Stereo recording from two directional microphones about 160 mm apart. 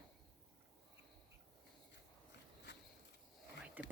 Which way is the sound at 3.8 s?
10° right (ahead or behind).